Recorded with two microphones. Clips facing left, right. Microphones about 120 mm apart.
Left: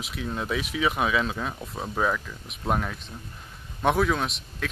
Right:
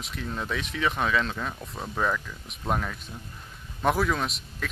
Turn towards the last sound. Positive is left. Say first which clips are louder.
# left 2 dB
turn(degrees=0)  # may be behind; listen again after turning